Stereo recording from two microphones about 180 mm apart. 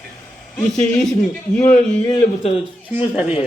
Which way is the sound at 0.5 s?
5° left (ahead or behind).